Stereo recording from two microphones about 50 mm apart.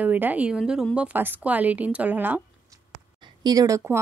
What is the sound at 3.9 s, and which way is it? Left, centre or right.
Speech, right.